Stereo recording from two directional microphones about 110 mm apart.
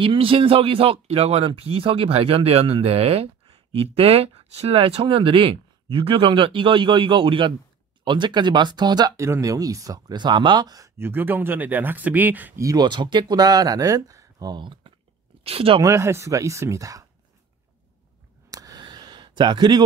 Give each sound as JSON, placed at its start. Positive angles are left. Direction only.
{"t": 0.0, "sound": "speech", "side_deg": -55}
{"t": 11.0, "sound": "speech", "side_deg": -20}
{"t": 12.5, "sound": "speech", "side_deg": -30}
{"t": 12.8, "sound": "speech", "side_deg": -45}
{"t": 15.4, "sound": "speech", "side_deg": -60}
{"t": 15.8, "sound": "speech", "side_deg": -25}
{"t": 18.5, "sound": "a sound", "side_deg": -30}